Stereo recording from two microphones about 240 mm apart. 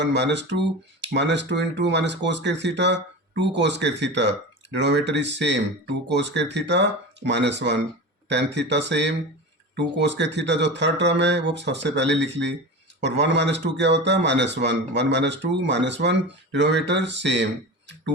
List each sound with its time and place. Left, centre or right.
0.0 s a man's voice: right